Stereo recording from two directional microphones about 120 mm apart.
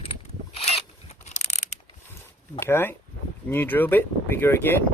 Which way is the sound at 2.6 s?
20° left (ahead or behind).